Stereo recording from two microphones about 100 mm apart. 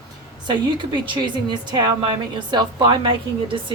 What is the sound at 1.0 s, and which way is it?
A woman's voice, 50° right (ahead or behind).